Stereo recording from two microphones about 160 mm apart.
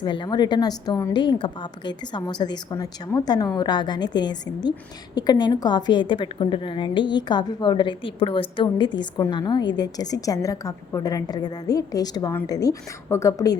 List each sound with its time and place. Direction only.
0.0 s a woman's voice: 30° left (ahead or behind)